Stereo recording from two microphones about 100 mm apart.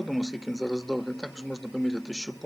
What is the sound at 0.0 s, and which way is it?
Speech, centre (ahead or behind).